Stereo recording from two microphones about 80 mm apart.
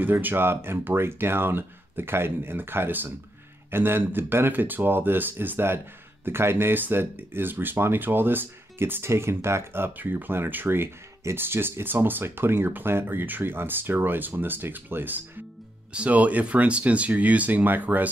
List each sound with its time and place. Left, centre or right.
0.0 s speech: right